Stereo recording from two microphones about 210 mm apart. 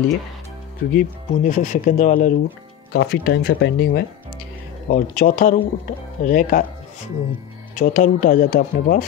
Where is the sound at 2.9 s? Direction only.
50° left (ahead or behind).